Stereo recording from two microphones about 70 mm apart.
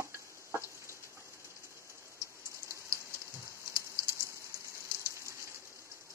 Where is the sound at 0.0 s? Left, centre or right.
Right.